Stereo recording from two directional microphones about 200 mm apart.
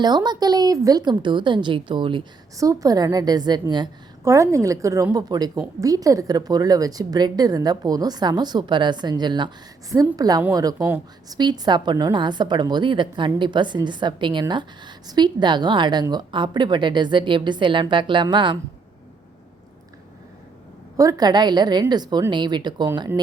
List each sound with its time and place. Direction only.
0.0 s a woman's voice: 20° right (ahead or behind)
20.9 s a woman's voice: 15° right (ahead or behind)